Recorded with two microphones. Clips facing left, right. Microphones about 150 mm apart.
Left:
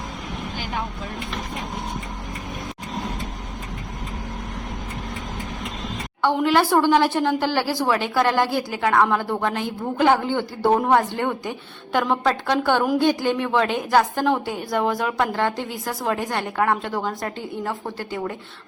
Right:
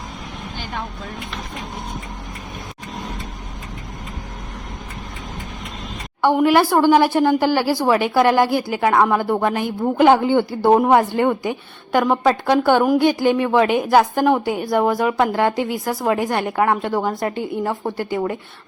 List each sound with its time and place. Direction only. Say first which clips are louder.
6.2 s a woman's voice: right 4 dB; 10° right (ahead or behind)